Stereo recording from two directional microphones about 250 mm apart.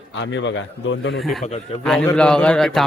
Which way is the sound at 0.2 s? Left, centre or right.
Left.